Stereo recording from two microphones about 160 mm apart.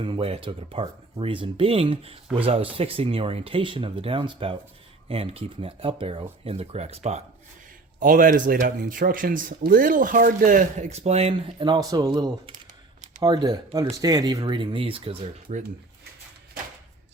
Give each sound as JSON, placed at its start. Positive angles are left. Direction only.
{"t": 0.0, "sound": "speech", "side_deg": -35}
{"t": 7.9, "sound": "speech", "side_deg": -55}